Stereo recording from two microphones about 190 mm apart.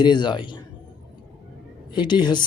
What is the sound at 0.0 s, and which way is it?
Speech, 25° left (ahead or behind).